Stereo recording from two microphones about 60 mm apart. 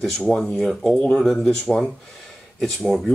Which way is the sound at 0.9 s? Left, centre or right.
Left.